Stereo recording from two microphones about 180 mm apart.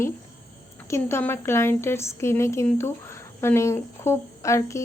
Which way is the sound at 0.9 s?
15° left (ahead or behind).